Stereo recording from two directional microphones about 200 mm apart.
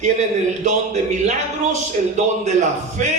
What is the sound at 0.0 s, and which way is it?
Speech, 35° right (ahead or behind).